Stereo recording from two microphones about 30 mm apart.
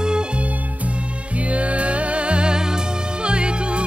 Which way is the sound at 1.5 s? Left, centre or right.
Right.